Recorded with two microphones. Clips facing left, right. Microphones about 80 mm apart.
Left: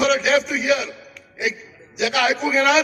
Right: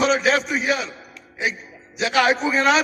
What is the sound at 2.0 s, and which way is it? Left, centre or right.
Speech, right.